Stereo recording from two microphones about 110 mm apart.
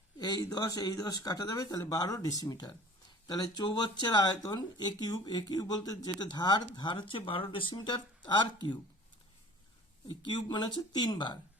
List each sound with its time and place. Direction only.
0.2 s speech: 35° left (ahead or behind)
10.1 s speech: 40° left (ahead or behind)